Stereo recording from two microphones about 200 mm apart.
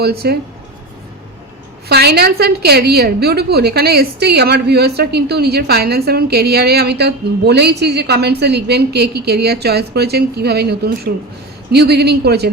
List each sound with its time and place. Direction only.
0.0 s a woman's voice: 50° right (ahead or behind)
1.9 s a woman's voice: 55° right (ahead or behind)